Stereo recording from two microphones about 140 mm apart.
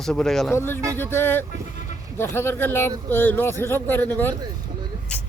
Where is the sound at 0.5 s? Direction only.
15° left (ahead or behind).